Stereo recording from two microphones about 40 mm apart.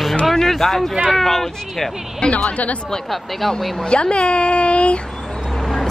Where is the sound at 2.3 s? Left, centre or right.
Left.